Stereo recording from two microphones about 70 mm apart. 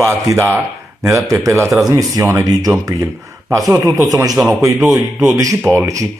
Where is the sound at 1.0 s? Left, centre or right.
Right.